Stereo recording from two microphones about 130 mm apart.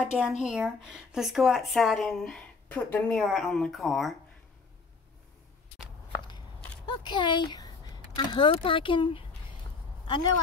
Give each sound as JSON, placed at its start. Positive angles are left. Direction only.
{"t": 0.0, "sound": "speech", "side_deg": -10}
{"t": 7.0, "sound": "speech", "side_deg": 35}